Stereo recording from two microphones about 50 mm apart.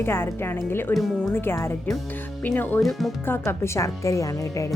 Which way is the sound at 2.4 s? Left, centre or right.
Left.